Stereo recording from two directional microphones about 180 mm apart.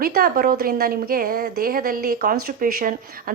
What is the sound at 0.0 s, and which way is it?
Speech, 55° right (ahead or behind).